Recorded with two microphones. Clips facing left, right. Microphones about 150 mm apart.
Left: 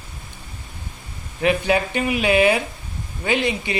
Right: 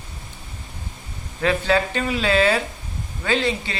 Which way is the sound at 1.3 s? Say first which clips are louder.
Left 1 dB; 15° left (ahead or behind).